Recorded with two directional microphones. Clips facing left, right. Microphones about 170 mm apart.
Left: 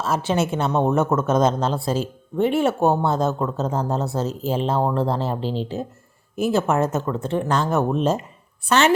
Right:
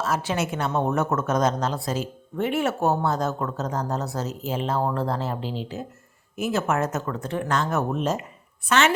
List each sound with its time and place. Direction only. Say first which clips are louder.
0.0 s a woman's voice: left 4 dB; 25° left (ahead or behind)